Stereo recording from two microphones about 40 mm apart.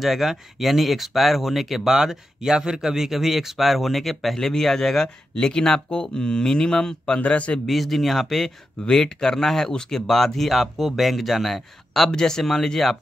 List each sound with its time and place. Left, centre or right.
0.0 s speech: centre
2.0 s speech: centre
7.2 s a man's voice: left
7.6 s speech: centre
8.9 s speech: centre
12.1 s speech: centre